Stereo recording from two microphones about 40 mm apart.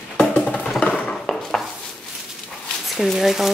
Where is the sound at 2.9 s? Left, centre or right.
Centre.